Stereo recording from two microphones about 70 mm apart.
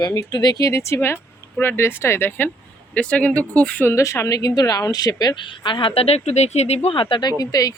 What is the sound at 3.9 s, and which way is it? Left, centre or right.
Speech, left.